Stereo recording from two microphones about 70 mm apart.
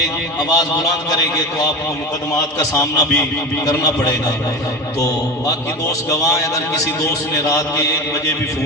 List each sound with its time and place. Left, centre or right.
0.3 s a man's voice: left
2.6 s a man's voice: left
6.1 s a man's voice: left